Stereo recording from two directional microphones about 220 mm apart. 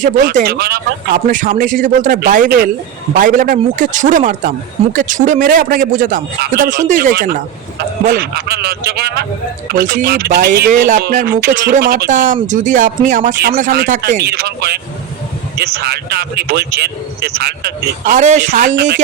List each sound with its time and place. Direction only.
0.0 s speech: 35° right (ahead or behind)